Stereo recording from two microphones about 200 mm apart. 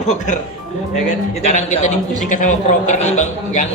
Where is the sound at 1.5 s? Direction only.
35° left (ahead or behind).